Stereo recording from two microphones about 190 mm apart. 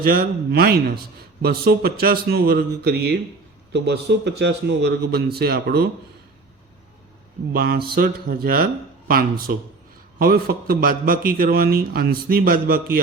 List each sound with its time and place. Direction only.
0.0 s a man's voice: 50° right (ahead or behind)
7.5 s a man's voice: 50° right (ahead or behind)